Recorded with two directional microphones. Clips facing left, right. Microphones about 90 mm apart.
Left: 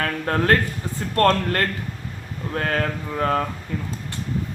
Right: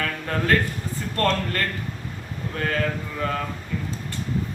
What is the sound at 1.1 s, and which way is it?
Mantra, 70° left (ahead or behind).